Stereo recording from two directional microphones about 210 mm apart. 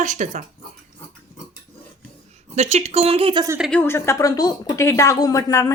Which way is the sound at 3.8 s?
10° left (ahead or behind).